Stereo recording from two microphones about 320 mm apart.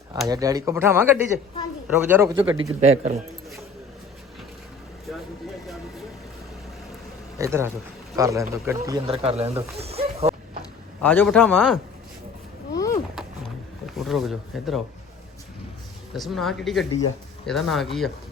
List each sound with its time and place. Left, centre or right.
0.3 s speech: centre
7.3 s speech: centre
11.0 s speech: centre
12.7 s vehicle: centre
13.8 s speech: centre
16.1 s speech: centre